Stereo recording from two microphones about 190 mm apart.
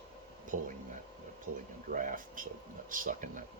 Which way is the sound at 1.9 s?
45° right (ahead or behind).